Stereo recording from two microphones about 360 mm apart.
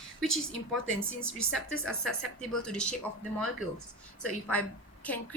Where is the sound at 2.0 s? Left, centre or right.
Centre.